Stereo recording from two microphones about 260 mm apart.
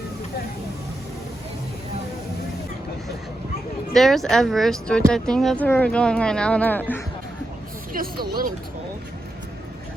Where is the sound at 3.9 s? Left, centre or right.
Centre.